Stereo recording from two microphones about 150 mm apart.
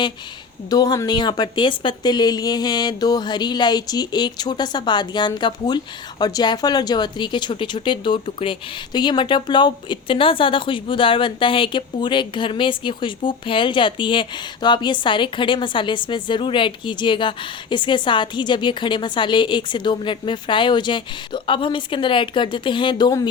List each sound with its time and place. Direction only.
0.7 s speech: 25° left (ahead or behind)